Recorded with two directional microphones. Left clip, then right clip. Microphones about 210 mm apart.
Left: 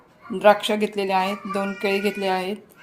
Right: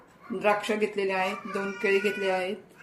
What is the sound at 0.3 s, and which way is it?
A woman's voice, 40° left (ahead or behind).